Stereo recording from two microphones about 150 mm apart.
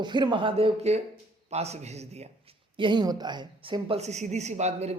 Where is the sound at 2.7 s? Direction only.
30° right (ahead or behind).